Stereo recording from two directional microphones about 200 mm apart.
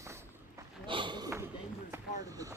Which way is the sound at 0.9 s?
25° right (ahead or behind).